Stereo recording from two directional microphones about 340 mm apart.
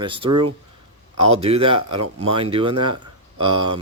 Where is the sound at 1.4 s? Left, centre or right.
Centre.